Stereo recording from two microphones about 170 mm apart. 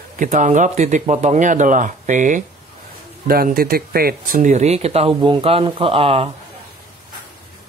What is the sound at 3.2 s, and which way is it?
Speech, 60° right (ahead or behind).